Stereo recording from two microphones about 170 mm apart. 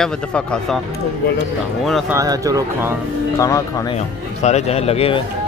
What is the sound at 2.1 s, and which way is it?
Speech, 20° right (ahead or behind).